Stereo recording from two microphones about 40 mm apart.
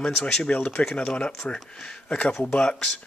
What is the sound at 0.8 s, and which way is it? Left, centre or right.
Speech, left.